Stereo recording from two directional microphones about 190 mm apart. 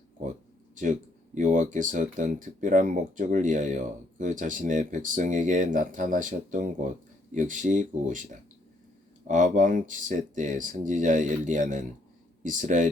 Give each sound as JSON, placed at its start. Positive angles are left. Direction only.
{"t": 0.2, "sound": "a sound", "side_deg": -40}
{"t": 1.4, "sound": "speech", "side_deg": -40}
{"t": 9.2, "sound": "speech", "side_deg": -40}